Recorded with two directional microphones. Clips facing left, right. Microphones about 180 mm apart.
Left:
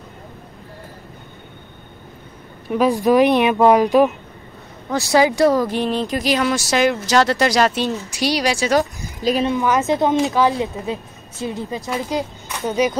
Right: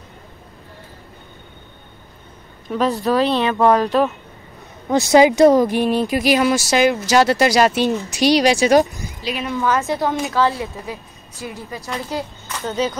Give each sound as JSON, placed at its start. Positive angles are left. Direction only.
{"t": 2.7, "sound": "speech", "side_deg": 15}
{"t": 4.9, "sound": "speech", "side_deg": -20}
{"t": 9.2, "sound": "speech", "side_deg": 35}
{"t": 9.5, "sound": "speech", "side_deg": 15}